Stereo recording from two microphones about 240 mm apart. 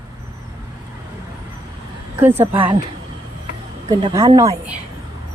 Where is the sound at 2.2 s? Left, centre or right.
Centre.